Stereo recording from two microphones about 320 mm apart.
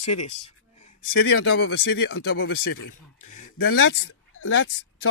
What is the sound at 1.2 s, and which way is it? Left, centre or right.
Speech, left.